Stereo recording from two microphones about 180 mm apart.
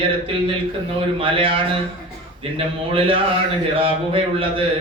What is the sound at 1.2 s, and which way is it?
Speech, 30° right (ahead or behind).